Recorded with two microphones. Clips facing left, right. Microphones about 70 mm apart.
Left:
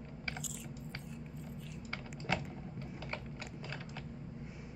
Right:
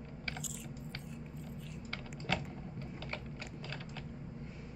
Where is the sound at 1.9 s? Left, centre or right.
Centre.